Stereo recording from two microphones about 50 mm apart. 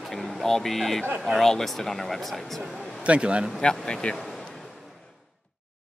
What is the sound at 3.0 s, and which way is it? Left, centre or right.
Speech, right.